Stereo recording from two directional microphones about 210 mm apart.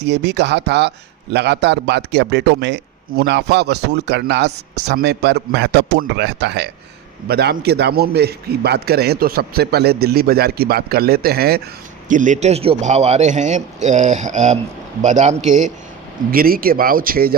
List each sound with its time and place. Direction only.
0.0 s a man's voice: 55° right (ahead or behind)
12.0 s a man's voice: 35° right (ahead or behind)